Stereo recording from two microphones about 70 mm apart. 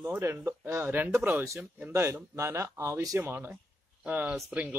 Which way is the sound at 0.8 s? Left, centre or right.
Right.